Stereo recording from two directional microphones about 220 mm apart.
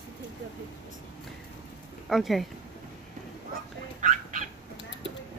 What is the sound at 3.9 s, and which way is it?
Dog, 35° right (ahead or behind).